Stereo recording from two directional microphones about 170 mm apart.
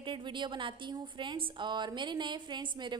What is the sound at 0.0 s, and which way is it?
A woman's voice, 30° right (ahead or behind).